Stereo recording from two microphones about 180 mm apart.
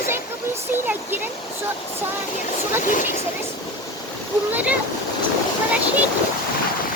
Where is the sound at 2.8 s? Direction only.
45° left (ahead or behind).